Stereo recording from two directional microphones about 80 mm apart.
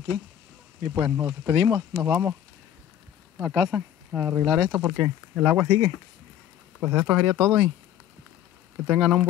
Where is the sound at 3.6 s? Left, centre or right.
Centre.